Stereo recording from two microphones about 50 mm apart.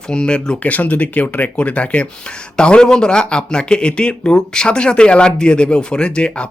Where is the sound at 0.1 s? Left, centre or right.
Centre.